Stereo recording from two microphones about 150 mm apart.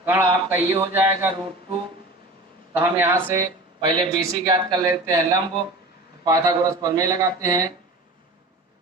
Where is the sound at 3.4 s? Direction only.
30° right (ahead or behind).